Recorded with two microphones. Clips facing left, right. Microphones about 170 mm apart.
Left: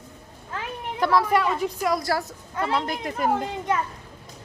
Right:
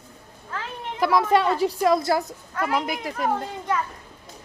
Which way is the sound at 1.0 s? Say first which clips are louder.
Right 1 dB; 15° right (ahead or behind).